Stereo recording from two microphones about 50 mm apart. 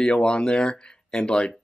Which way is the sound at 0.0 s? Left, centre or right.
Centre.